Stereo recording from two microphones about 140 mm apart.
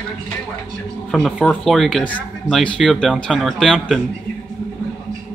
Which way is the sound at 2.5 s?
Centre (ahead or behind).